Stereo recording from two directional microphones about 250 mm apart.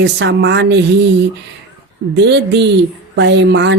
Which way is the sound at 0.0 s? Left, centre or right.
Right.